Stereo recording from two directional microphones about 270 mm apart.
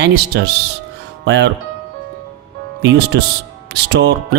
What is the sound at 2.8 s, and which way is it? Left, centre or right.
Speech, right.